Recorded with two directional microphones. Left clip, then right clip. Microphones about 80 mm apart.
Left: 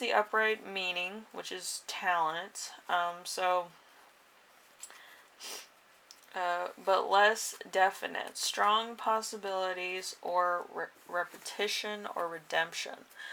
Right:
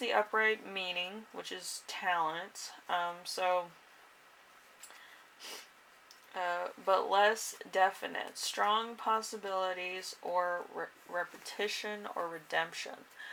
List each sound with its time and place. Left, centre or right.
0.0 s speech: left
5.4 s sniff: left
6.3 s speech: left